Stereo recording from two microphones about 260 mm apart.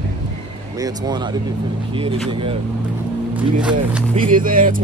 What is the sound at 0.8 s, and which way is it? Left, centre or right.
Speech, centre.